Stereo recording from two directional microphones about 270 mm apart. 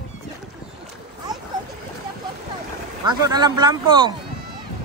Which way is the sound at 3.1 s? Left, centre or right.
Centre.